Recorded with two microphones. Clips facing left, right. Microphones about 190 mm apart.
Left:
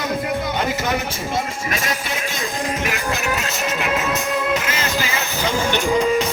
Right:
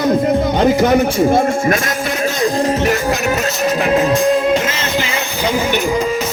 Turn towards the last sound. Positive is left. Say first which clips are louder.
# right 1 dB
turn(degrees=-5)  # may be behind; listen again after turning